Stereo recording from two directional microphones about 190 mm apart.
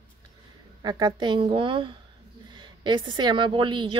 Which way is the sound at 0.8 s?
20° right (ahead or behind).